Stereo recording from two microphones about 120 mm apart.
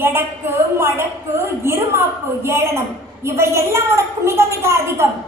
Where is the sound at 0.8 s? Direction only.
20° right (ahead or behind).